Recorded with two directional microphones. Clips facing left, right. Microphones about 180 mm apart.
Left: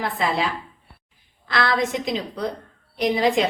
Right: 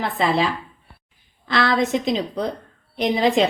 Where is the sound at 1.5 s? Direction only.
25° right (ahead or behind).